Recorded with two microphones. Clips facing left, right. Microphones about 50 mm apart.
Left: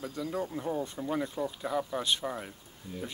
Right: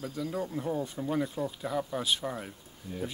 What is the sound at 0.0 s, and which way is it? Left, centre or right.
Speech, centre.